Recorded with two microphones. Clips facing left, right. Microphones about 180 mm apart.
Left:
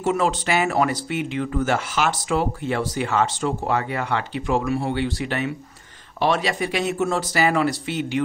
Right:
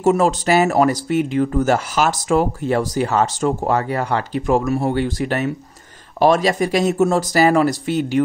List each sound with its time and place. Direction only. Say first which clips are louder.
0.0 s speech: right 6 dB; 40° right (ahead or behind)